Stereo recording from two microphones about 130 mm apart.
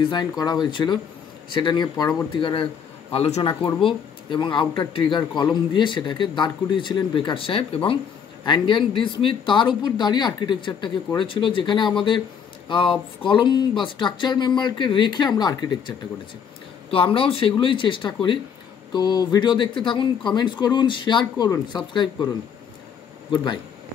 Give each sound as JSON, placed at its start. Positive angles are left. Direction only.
{"t": 0.1, "sound": "a man's voice", "side_deg": 30}
{"t": 3.6, "sound": "speech", "side_deg": 40}
{"t": 16.9, "sound": "speech", "side_deg": 45}
{"t": 23.3, "sound": "speech", "side_deg": 35}